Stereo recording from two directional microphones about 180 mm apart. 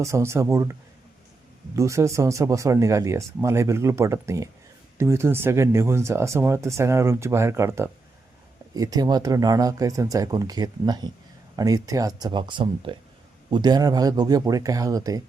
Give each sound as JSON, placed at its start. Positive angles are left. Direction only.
{"t": 0.0, "sound": "speech", "side_deg": -15}